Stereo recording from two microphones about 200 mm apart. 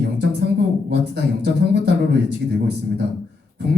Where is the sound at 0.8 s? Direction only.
55° right (ahead or behind).